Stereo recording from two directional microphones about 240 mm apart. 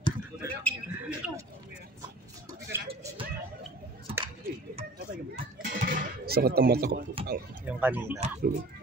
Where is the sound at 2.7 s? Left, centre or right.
Centre.